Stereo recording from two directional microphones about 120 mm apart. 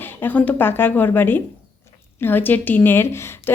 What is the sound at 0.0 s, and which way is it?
A woman's voice, 15° left (ahead or behind).